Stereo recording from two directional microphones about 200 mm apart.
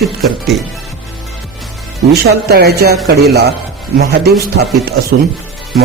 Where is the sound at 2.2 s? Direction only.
50° right (ahead or behind).